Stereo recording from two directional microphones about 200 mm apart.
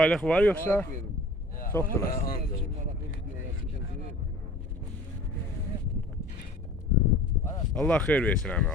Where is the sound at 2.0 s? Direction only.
45° left (ahead or behind).